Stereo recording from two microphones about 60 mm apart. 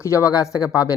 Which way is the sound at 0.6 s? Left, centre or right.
Left.